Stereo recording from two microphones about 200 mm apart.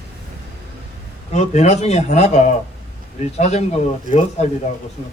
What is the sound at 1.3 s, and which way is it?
Speech, 35° left (ahead or behind).